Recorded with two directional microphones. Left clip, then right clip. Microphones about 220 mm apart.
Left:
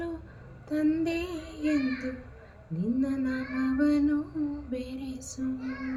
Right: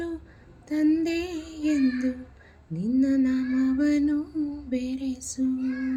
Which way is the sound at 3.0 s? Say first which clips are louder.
Right 7 dB; 40° right (ahead or behind).